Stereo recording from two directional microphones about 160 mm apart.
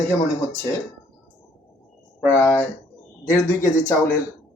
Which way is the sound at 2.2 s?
15° left (ahead or behind).